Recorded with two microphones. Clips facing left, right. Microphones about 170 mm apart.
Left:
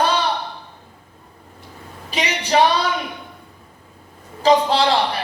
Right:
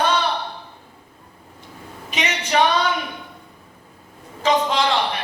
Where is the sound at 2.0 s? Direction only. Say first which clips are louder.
Left 3 dB; 35° left (ahead or behind).